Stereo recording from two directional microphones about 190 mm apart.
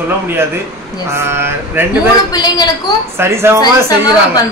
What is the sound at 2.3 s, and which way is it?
Speech, 20° left (ahead or behind).